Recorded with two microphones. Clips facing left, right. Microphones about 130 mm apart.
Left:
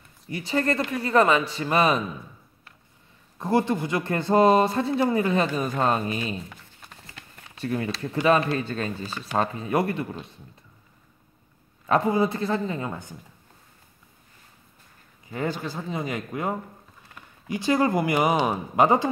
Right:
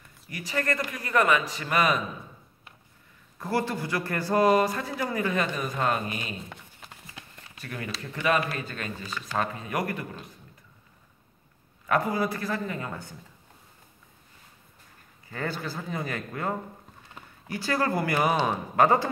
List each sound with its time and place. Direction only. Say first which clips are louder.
0.3 s speech: left 5 dB; 25° left (ahead or behind)
3.3 s speech: left 5 dB; 20° left (ahead or behind)
7.5 s speech: left 9 dB; 30° left (ahead or behind)
11.8 s speech: left 4 dB; 25° left (ahead or behind)
15.2 s speech: left 4 dB; 20° left (ahead or behind)